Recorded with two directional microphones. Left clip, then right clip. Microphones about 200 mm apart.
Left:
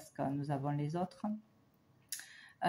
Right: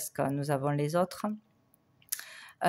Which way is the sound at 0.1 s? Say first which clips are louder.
Right 7 dB; 45° right (ahead or behind).